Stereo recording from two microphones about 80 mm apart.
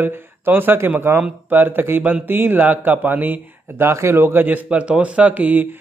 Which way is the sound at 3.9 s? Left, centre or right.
Right.